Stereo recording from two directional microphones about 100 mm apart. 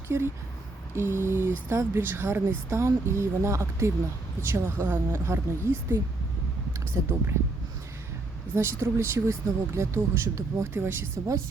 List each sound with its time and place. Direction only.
0.9 s speech: 25° right (ahead or behind)
8.5 s speech: 25° right (ahead or behind)